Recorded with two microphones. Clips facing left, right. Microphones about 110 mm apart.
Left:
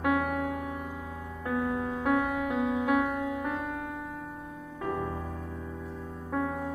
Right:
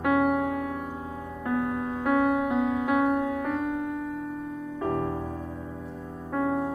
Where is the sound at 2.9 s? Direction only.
5° right (ahead or behind).